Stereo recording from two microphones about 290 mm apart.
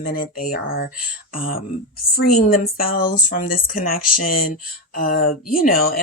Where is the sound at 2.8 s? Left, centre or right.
Left.